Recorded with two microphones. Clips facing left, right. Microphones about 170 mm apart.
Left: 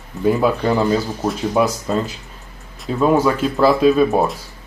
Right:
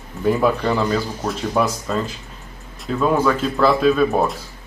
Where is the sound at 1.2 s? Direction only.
Centre (ahead or behind).